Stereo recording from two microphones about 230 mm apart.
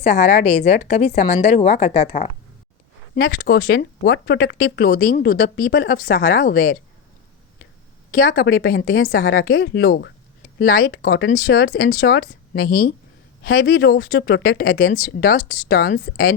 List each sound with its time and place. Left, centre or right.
0.0 s a woman's voice: left
3.2 s speech: left
8.1 s speech: left